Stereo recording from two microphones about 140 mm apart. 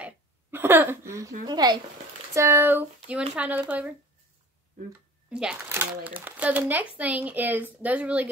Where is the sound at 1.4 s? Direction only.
30° right (ahead or behind).